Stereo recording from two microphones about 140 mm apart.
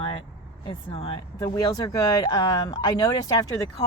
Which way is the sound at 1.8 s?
25° left (ahead or behind).